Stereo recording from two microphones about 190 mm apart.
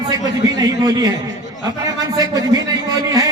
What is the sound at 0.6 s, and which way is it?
Speech, 20° right (ahead or behind).